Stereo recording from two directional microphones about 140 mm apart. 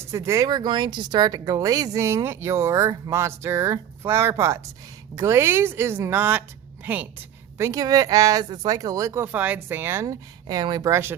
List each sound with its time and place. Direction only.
0.1 s a woman's voice: 20° right (ahead or behind)